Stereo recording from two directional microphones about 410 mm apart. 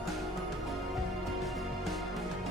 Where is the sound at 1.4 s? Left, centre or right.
Centre.